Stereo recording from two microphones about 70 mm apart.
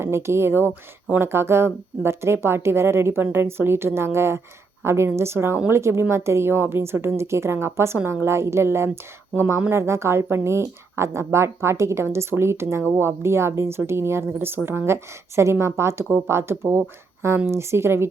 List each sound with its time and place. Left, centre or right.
0.0 s a woman's voice: right